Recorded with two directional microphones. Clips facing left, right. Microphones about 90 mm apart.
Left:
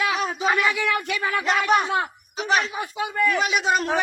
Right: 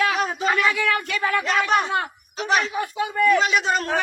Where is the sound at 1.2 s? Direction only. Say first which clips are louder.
Right 2 dB; 5° left (ahead or behind).